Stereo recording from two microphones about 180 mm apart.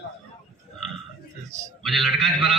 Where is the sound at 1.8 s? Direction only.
Centre (ahead or behind).